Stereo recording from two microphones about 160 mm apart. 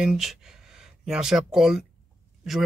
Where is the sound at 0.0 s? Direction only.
5° right (ahead or behind).